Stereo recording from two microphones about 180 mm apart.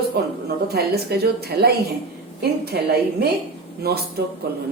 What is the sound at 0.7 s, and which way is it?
A woman's voice, 65° right (ahead or behind).